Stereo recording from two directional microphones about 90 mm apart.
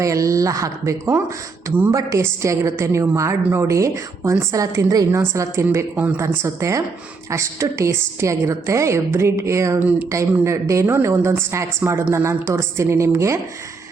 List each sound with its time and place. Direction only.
0.0 s a woman's voice: 35° right (ahead or behind)
5.6 s a woman's voice: 20° right (ahead or behind)